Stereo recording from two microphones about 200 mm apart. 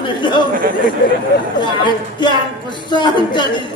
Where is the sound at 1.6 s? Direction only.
25° left (ahead or behind).